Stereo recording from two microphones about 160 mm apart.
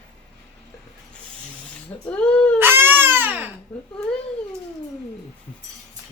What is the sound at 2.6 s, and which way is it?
Baby cry, 15° right (ahead or behind).